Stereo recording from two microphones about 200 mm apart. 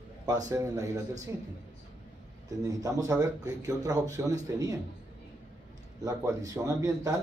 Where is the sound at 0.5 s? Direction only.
15° right (ahead or behind).